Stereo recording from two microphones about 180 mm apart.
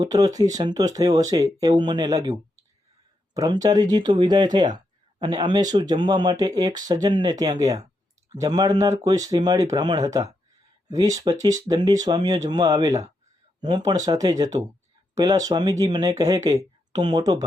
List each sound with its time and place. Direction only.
0.0 s speech: 20° right (ahead or behind)